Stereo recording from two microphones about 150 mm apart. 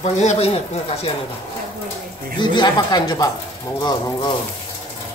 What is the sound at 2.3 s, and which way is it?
Speech, 30° left (ahead or behind).